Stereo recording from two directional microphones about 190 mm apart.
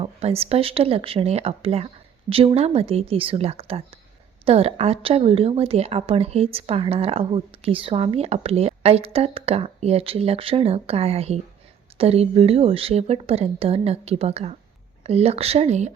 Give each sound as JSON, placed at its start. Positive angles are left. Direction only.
{"t": 0.0, "sound": "a woman's voice", "side_deg": -30}